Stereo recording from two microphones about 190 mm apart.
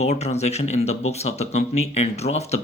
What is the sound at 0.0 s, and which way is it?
Speech, 35° left (ahead or behind).